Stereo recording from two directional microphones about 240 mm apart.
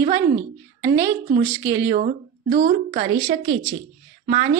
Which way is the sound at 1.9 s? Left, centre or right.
Right.